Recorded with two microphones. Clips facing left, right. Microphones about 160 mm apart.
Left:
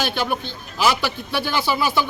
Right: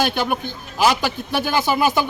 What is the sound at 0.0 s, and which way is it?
Speech, 15° right (ahead or behind).